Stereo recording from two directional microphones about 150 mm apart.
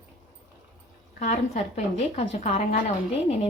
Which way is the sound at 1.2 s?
50° left (ahead or behind).